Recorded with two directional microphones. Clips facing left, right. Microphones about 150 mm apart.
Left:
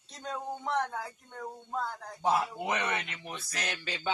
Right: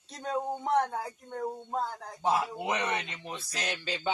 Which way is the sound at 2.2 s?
15° right (ahead or behind).